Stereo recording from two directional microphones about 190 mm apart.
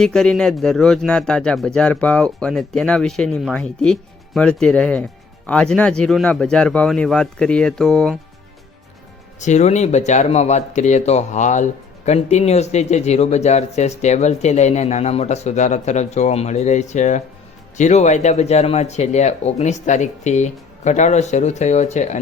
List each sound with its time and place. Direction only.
0.0 s speech: 5° left (ahead or behind)
9.4 s speech: 40° left (ahead or behind)